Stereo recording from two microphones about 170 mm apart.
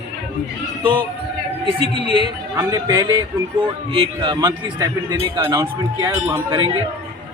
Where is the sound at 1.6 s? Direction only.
30° right (ahead or behind); by 6.5 s 15° right (ahead or behind).